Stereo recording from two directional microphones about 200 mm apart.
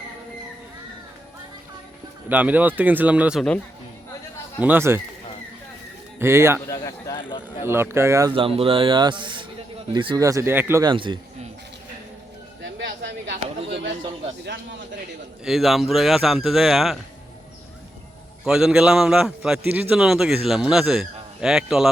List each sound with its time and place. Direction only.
2.3 s speech: 10° right (ahead or behind)
4.6 s speech: 10° right (ahead or behind)
6.1 s speech: 10° right (ahead or behind)
6.7 s speech: 20° left (ahead or behind)
7.6 s speech: 10° right (ahead or behind)
8.3 s a man's voice: 25° right (ahead or behind); by 10.8 s 10° right (ahead or behind)
10.8 s a man's voice: 25° right (ahead or behind)
12.8 s a sound: 60° right (ahead or behind)
15.4 s a man's voice: centre (ahead or behind)
18.4 s a man's voice: 5° right (ahead or behind)